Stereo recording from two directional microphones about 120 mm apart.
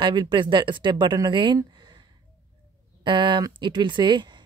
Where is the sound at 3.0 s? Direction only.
45° right (ahead or behind).